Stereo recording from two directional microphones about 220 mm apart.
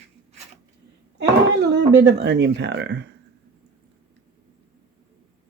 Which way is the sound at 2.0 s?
50° right (ahead or behind).